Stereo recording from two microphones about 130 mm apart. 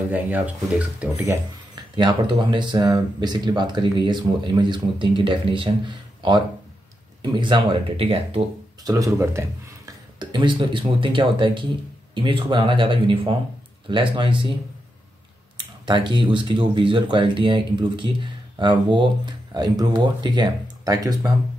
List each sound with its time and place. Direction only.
0.1 s speech: 10° right (ahead or behind)
2.0 s speech: 40° right (ahead or behind)
8.8 s speech: 25° right (ahead or behind)
10.1 s speech: 35° right (ahead or behind)
15.5 s speech: 35° right (ahead or behind)